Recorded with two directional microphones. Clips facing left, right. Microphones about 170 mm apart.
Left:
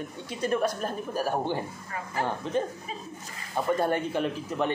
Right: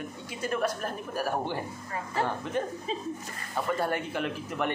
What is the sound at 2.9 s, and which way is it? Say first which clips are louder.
Speech: right 5 dB; 25° right (ahead or behind).